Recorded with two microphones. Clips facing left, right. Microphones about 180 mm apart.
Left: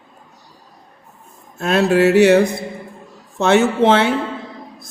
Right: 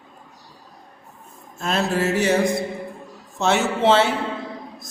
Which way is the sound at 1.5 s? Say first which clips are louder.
Left 8 dB; 60° left (ahead or behind).